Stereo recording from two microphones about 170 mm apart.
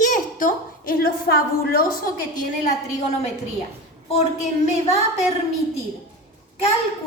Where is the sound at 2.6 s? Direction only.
40° left (ahead or behind).